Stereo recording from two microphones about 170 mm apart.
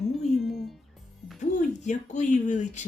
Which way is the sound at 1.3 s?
45° left (ahead or behind).